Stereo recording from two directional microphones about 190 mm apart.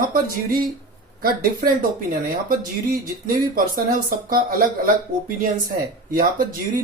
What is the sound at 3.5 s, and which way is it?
Speech, 45° right (ahead or behind).